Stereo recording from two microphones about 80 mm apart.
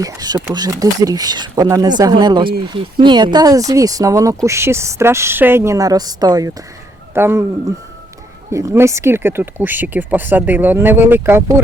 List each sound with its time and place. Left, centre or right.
0.0 s speech: right
5.7 s speech: right
7.1 s speech: right
8.5 s speech: right